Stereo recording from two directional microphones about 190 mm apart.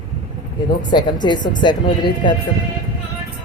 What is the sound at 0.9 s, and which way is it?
Speech, 25° left (ahead or behind).